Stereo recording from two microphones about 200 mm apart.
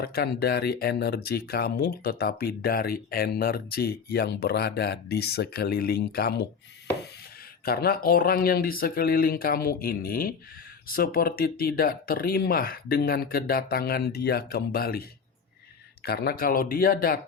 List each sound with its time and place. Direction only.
0.0 s speech: 50° left (ahead or behind)
7.6 s speech: 50° left (ahead or behind)
16.0 s speech: 50° left (ahead or behind)